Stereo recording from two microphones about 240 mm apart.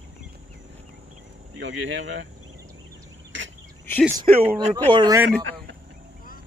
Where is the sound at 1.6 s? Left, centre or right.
Right.